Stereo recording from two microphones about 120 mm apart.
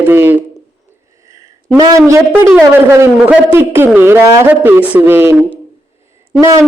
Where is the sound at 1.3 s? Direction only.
30° right (ahead or behind).